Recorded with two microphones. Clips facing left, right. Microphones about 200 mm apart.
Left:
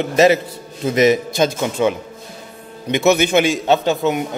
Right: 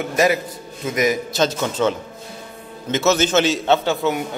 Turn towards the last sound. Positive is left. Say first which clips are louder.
# left 2 dB
turn(degrees=15)  # may be behind; listen again after turning